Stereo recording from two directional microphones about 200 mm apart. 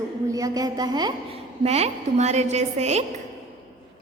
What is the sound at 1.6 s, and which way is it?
A woman's voice, 30° right (ahead or behind).